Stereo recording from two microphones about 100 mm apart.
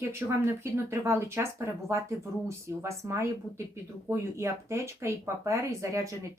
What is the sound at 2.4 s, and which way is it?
Speech, 30° right (ahead or behind).